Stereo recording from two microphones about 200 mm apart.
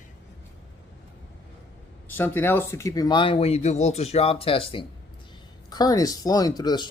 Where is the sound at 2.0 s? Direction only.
10° left (ahead or behind).